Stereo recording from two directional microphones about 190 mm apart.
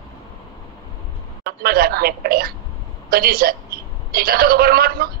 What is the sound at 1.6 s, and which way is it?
A woman's voice, 55° right (ahead or behind).